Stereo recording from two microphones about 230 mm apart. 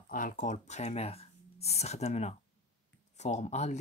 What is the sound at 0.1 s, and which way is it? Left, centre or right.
Speech, left.